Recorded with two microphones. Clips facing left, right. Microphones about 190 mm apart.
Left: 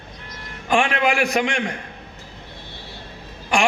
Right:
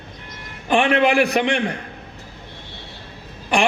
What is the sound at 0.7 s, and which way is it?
Speech, 35° right (ahead or behind).